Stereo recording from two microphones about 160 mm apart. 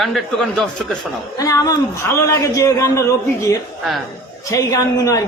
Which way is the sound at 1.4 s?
20° left (ahead or behind).